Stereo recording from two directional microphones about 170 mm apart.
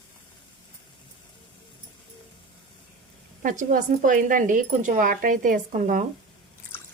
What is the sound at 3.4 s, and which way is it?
Speech, 50° right (ahead or behind).